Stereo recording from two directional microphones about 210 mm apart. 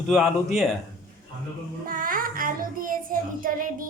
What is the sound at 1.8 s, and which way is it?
Child singing, 40° right (ahead or behind).